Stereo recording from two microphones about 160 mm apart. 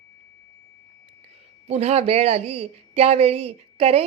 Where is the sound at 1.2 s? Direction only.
40° right (ahead or behind).